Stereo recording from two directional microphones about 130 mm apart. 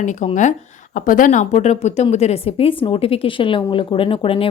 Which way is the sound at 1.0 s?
90° left.